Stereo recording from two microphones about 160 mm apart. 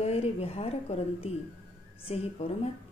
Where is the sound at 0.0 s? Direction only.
40° left (ahead or behind).